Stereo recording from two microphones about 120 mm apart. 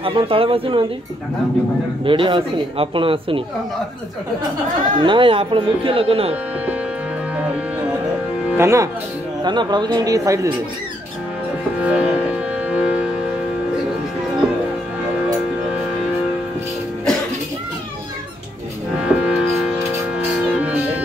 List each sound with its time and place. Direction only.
0.0 s speech: 50° right (ahead or behind)
2.0 s speech: 45° right (ahead or behind)
5.0 s speech: 45° right (ahead or behind)
8.5 s speech: 25° right (ahead or behind)
9.4 s speech: 40° right (ahead or behind)
11.8 s music: 10° right (ahead or behind)
18.9 s music: 10° right (ahead or behind)